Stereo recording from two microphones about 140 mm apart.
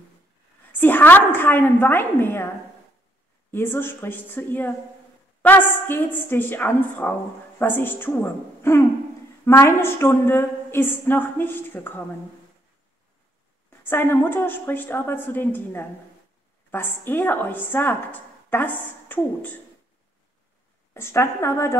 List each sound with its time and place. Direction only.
0.7 s a woman's voice: 15° left (ahead or behind)
3.5 s a woman's voice: 15° left (ahead or behind)
13.8 s a woman's voice: 15° left (ahead or behind)
20.9 s a woman's voice: 20° left (ahead or behind)